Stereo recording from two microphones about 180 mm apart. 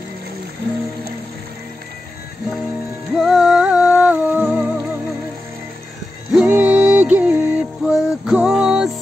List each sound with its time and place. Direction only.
3.2 s music: 5° right (ahead or behind)
6.3 s music: 5° right (ahead or behind)